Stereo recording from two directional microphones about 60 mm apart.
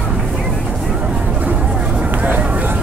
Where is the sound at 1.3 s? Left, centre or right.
Right.